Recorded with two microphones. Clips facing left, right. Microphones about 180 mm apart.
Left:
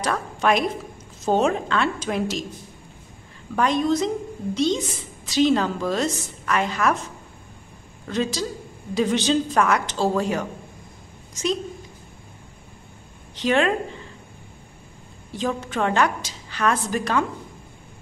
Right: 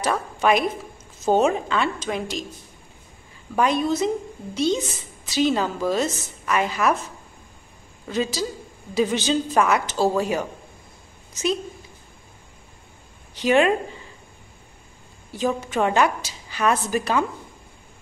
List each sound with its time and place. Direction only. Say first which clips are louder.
0.0 s a woman's voice: right 1 dB; 5° right (ahead or behind)
3.5 s a woman's voice: even; 5° right (ahead or behind)
8.1 s a woman's voice: even; 5° right (ahead or behind)
13.3 s speech: right 2 dB; 10° right (ahead or behind)
15.3 s a woman's voice: right 2 dB; 10° right (ahead or behind)